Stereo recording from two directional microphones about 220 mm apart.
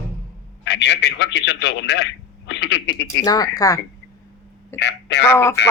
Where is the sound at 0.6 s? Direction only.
50° left (ahead or behind).